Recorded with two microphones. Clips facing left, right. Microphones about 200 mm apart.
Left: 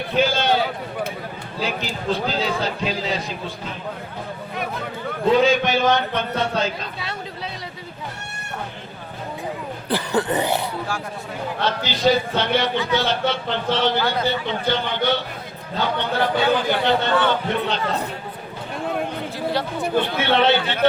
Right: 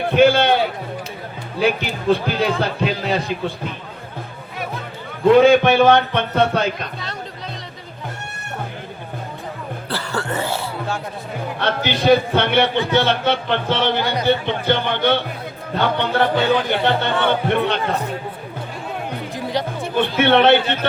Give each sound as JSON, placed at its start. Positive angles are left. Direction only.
{"t": 0.1, "sound": "a man's voice", "side_deg": -60}
{"t": 5.2, "sound": "a man's voice", "side_deg": -60}
{"t": 9.9, "sound": "speech", "side_deg": 20}
{"t": 11.6, "sound": "a man's voice", "side_deg": -60}
{"t": 19.5, "sound": "music", "side_deg": -15}
{"t": 20.0, "sound": "a man's voice", "side_deg": -60}